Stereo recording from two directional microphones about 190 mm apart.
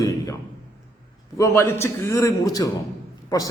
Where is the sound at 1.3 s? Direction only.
15° left (ahead or behind).